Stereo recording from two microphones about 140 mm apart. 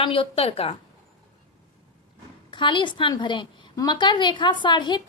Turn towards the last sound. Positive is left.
turn(degrees=35)  # may be behind; listen again after turning